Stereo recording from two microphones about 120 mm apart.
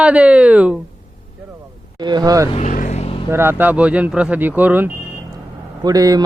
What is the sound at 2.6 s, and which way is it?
Vehicle, 80° left.